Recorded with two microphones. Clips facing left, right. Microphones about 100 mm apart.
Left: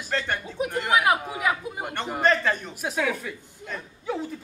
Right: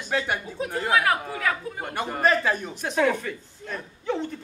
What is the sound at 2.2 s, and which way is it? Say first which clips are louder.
A woman's voice: even; 5° right (ahead or behind).